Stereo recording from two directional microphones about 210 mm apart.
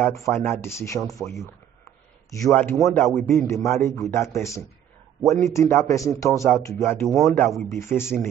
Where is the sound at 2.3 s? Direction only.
15° left (ahead or behind).